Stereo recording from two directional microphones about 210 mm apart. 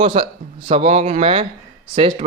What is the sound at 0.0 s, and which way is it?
A man's voice, 25° right (ahead or behind).